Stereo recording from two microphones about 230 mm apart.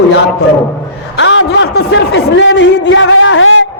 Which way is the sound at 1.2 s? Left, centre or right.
Left.